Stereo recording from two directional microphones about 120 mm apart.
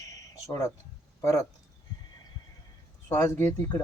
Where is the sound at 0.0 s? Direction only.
30° left (ahead or behind).